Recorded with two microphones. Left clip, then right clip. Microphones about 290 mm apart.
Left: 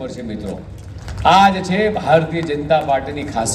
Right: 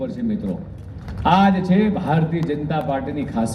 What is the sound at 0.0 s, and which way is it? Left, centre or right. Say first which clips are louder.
A man's voice: right 1 dB; left.